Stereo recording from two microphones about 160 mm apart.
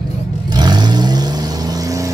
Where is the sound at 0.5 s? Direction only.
25° right (ahead or behind).